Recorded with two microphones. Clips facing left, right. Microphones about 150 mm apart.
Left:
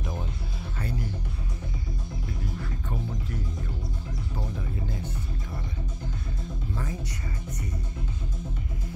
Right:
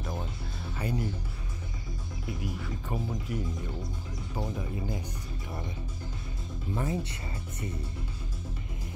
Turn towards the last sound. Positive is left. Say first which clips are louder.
# right 3 dB
turn(degrees=-25)  # may be behind; listen again after turning